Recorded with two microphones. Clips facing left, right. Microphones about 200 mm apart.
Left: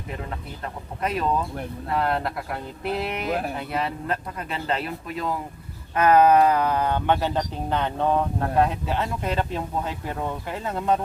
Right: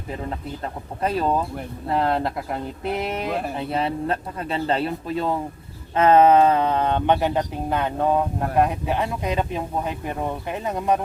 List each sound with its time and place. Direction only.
0.3 s speech: 30° right (ahead or behind); by 11.0 s 15° right (ahead or behind)